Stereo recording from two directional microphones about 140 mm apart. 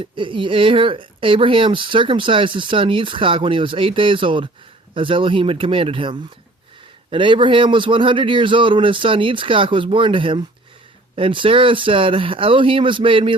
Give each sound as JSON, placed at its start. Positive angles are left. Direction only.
{"t": 0.0, "sound": "speech", "side_deg": -35}